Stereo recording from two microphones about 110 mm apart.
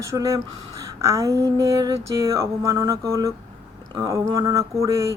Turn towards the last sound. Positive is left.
turn(degrees=-30)  # may be behind; listen again after turning